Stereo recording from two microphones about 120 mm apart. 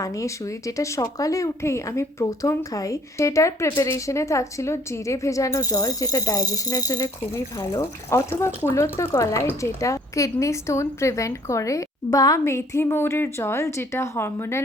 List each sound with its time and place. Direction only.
0.0 s speech: 25° left (ahead or behind)